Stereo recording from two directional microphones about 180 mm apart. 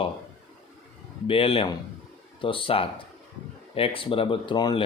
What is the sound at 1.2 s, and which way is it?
Speech, 30° left (ahead or behind).